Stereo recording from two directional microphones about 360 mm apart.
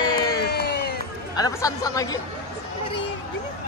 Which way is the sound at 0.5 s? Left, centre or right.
Left.